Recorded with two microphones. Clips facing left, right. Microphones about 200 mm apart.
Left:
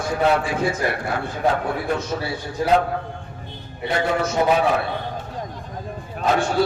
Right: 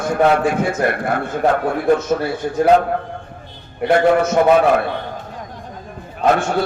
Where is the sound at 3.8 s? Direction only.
55° right (ahead or behind).